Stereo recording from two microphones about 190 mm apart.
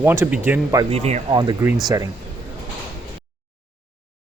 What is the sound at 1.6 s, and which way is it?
Speech, 10° right (ahead or behind).